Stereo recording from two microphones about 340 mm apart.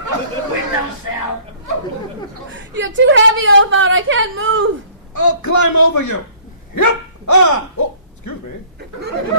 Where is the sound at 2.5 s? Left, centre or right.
Right.